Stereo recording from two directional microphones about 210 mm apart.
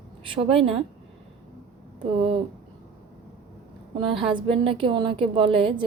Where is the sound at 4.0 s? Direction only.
25° right (ahead or behind).